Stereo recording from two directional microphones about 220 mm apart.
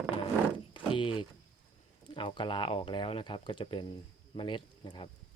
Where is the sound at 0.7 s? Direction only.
20° left (ahead or behind).